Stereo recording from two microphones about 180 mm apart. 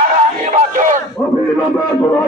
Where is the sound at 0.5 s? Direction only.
45° right (ahead or behind).